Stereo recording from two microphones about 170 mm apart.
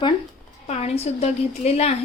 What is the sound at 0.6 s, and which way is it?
A woman's voice, 40° left (ahead or behind).